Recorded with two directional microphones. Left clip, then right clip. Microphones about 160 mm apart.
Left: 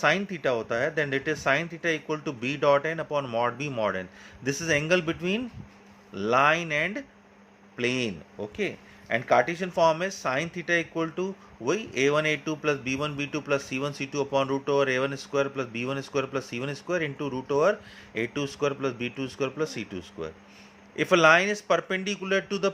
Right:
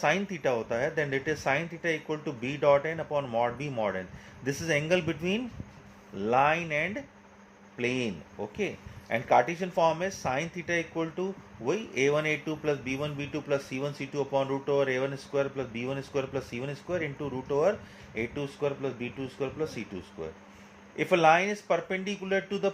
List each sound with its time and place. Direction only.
0.0 s a man's voice: 20° left (ahead or behind)